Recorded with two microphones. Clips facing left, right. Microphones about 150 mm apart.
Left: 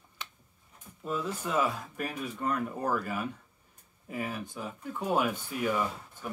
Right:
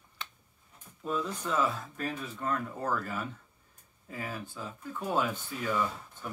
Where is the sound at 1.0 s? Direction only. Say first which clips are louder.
Even; 5° left (ahead or behind).